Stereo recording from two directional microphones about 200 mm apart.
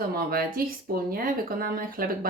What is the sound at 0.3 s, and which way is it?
Speech, 50° right (ahead or behind).